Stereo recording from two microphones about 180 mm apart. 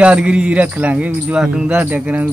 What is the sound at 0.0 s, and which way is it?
Speech, 5° right (ahead or behind).